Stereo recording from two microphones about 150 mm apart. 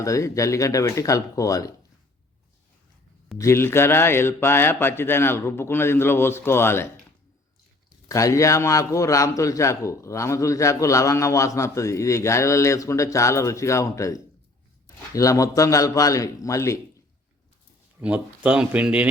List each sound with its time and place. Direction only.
0.0 s a man's voice: 20° left (ahead or behind)
3.3 s a man's voice: 20° left (ahead or behind)
8.0 s a man's voice: 20° left (ahead or behind)
18.0 s speech: 10° right (ahead or behind)